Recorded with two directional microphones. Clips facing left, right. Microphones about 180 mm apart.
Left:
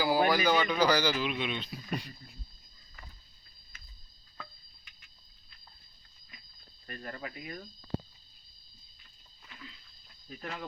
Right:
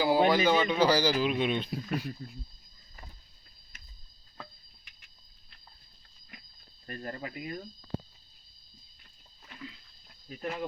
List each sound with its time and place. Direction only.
0.0 s speech: 25° right (ahead or behind); by 1.8 s 50° right (ahead or behind)
1.9 s speech: 5° right (ahead or behind)
6.8 s speech: 35° right (ahead or behind)
10.4 s speech: 20° right (ahead or behind)